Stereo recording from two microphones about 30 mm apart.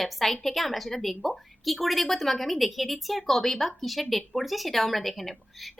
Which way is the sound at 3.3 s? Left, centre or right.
Centre.